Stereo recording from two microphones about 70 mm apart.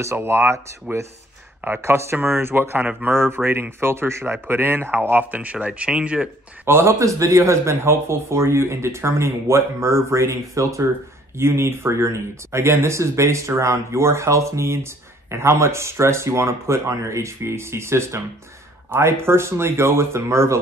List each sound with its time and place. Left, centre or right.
0.0 s speech: right
1.8 s speech: right; by 6.3 s centre
6.6 s speech: right